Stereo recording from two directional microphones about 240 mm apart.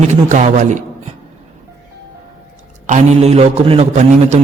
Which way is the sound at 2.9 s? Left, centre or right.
Right.